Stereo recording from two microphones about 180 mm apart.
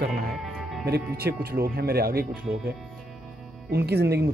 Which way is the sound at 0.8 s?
60° right (ahead or behind).